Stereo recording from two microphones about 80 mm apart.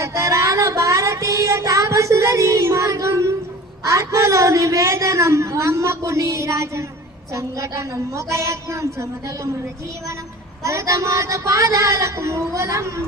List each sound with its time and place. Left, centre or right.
0.0 s music: right
3.8 s a man's voice: right
10.6 s a man's voice: right